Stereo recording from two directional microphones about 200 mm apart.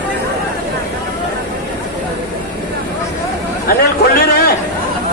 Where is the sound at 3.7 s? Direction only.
50° left (ahead or behind).